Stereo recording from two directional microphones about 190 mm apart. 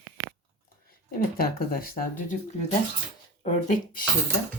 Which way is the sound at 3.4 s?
40° left (ahead or behind).